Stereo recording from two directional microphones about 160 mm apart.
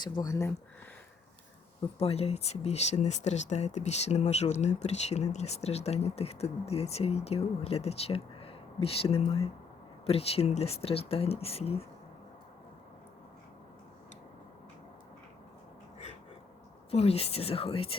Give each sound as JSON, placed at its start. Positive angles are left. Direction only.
{"t": 0.0, "sound": "speech", "side_deg": 20}
{"t": 2.0, "sound": "speech", "side_deg": 40}
{"t": 16.9, "sound": "speech", "side_deg": 40}